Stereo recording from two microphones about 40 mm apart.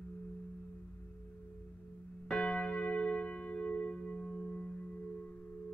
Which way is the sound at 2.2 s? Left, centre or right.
Left.